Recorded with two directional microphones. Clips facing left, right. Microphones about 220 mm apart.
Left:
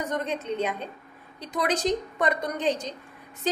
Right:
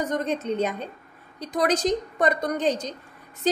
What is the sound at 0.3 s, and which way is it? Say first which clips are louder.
A woman's voice: right 3 dB; 40° right (ahead or behind).